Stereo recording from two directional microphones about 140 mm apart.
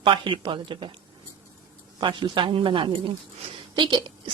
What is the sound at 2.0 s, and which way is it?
Speech, 35° right (ahead or behind).